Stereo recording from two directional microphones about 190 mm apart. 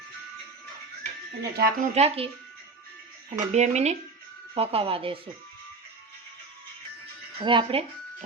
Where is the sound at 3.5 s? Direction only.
35° right (ahead or behind).